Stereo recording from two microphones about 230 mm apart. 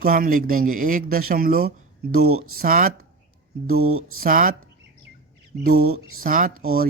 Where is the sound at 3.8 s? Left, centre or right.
Right.